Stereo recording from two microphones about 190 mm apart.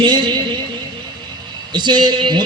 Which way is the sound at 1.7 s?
25° right (ahead or behind).